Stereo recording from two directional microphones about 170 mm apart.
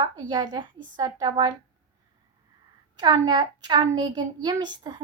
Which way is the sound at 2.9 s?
25° right (ahead or behind).